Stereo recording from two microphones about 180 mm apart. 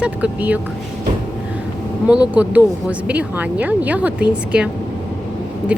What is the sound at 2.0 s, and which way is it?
A woman's voice, 10° right (ahead or behind).